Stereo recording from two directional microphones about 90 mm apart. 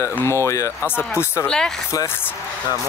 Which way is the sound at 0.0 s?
30° left (ahead or behind).